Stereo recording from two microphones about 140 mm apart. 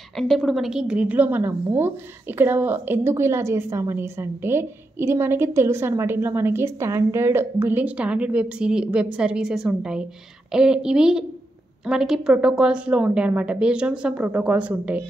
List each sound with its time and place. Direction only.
0.1 s a woman's voice: centre (ahead or behind)